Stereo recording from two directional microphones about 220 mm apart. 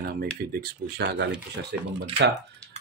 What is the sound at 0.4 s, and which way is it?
Speech, 45° right (ahead or behind).